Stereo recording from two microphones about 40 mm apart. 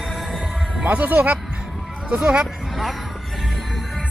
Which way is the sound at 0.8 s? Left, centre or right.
Right.